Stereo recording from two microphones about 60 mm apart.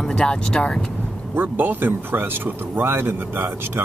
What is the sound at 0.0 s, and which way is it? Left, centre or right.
Speech, centre.